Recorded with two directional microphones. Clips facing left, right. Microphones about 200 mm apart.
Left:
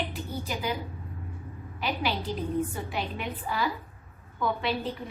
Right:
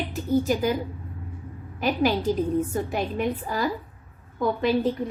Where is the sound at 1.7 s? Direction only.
45° right (ahead or behind).